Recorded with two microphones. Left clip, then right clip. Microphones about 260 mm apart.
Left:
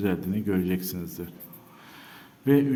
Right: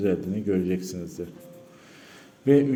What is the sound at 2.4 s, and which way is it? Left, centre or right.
Speech, centre.